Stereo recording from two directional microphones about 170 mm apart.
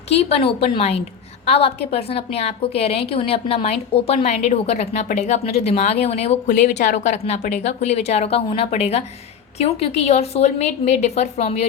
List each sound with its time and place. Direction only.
0.1 s a woman's voice: 35° left (ahead or behind)